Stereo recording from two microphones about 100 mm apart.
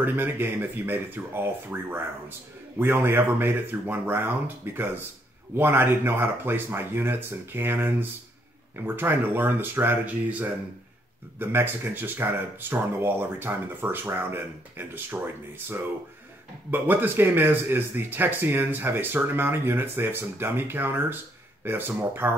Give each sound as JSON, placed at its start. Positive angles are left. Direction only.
{"t": 0.0, "sound": "speech", "side_deg": -20}